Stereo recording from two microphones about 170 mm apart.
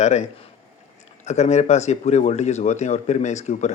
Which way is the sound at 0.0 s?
45° left (ahead or behind).